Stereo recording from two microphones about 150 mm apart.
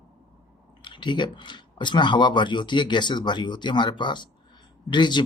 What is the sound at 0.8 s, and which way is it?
Speech, 30° left (ahead or behind).